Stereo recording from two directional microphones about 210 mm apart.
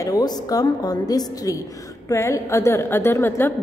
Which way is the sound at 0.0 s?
15° left (ahead or behind).